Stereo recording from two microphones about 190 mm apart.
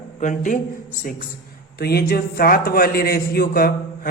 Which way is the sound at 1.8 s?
55° left (ahead or behind).